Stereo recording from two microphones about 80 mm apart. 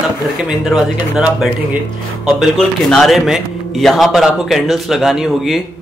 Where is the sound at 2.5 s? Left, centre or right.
Centre.